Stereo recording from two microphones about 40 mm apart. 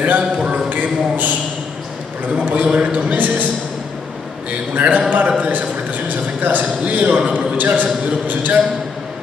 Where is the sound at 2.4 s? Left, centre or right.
Right.